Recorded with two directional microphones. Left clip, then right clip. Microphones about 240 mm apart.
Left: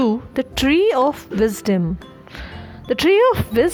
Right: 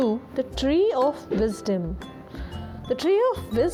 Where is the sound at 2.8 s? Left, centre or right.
Left.